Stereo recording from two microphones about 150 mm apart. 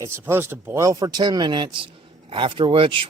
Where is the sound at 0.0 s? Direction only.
15° right (ahead or behind).